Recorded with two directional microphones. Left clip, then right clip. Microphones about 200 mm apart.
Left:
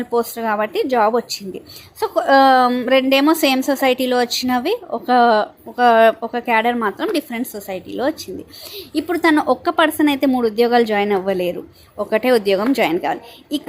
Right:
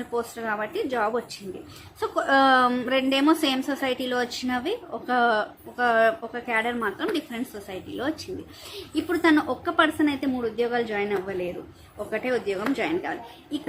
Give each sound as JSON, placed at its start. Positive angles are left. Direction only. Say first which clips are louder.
{"t": 0.0, "sound": "a woman's voice", "louder": "left 9 dB", "side_deg": 30}